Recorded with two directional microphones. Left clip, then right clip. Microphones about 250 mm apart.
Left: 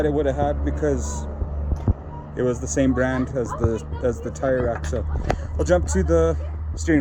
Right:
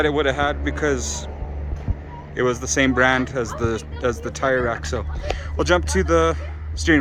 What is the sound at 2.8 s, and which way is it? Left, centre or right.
Speech, centre.